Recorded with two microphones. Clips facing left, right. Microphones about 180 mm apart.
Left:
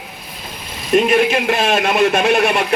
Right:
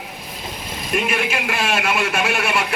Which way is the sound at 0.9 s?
30° left (ahead or behind).